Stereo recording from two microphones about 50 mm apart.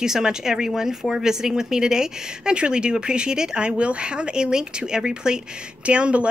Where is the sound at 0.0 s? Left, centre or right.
Centre.